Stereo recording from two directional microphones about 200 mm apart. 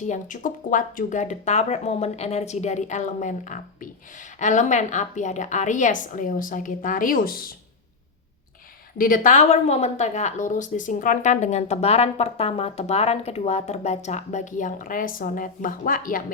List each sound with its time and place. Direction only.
0.0 s speech: 40° left (ahead or behind)
9.0 s speech: 45° left (ahead or behind)